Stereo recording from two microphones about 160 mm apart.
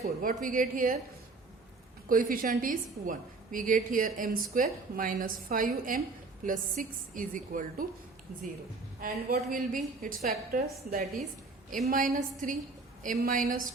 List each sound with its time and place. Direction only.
0.0 s a woman's voice: 60° right (ahead or behind)
2.0 s a woman's voice: 60° right (ahead or behind)
9.0 s a woman's voice: 60° right (ahead or behind)
11.9 s a woman's voice: 55° right (ahead or behind)